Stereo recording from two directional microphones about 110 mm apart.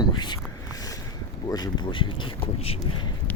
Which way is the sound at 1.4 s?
35° left (ahead or behind).